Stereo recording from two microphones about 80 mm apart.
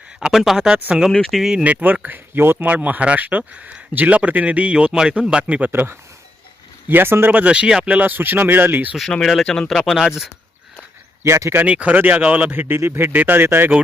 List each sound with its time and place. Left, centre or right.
0.2 s speech: centre
1.6 s speech: centre
9.2 s speech: centre
10.0 s speech: centre
11.2 s speech: right
11.6 s speech: centre